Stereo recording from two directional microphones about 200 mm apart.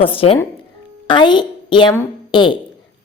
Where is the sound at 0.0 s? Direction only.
25° left (ahead or behind).